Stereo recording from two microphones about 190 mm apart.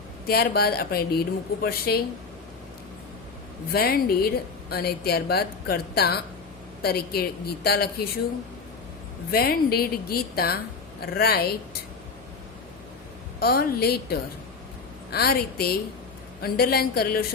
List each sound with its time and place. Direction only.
0.3 s a woman's voice: 55° left (ahead or behind)
3.7 s a woman's voice: 55° left (ahead or behind)
9.3 s a woman's voice: 55° left (ahead or behind)
13.4 s a woman's voice: 55° left (ahead or behind)